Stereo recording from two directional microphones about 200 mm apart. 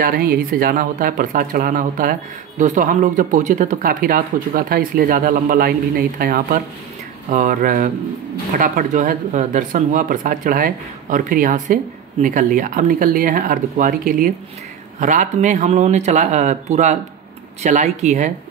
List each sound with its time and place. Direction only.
0.0 s speech: 50° right (ahead or behind)